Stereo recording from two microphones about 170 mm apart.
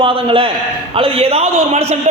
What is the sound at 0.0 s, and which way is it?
A man's voice, 30° right (ahead or behind).